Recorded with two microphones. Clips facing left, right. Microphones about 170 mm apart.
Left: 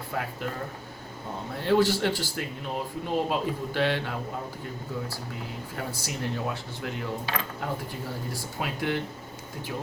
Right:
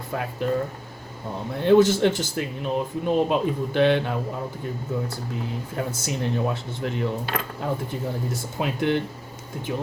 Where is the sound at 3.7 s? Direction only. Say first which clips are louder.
Right 8 dB; 20° right (ahead or behind).